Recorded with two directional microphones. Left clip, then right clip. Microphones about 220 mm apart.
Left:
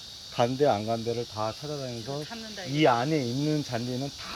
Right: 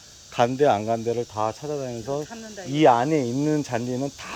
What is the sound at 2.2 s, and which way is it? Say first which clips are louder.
Speech: right 1 dB; 40° right (ahead or behind).